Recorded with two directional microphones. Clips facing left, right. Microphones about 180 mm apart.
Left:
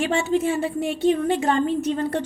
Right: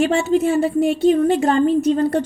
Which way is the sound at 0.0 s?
40° right (ahead or behind).